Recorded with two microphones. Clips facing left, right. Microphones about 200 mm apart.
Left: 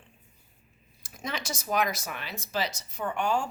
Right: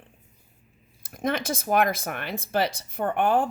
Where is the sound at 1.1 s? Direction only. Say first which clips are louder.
Right 9 dB; 55° right (ahead or behind).